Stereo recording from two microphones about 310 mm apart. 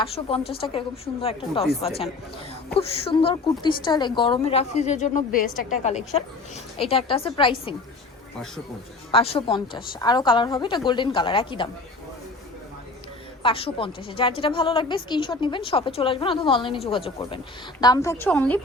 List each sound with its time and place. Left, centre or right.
0.0 s a woman's voice: centre
9.1 s a woman's voice: centre
13.4 s a woman's voice: centre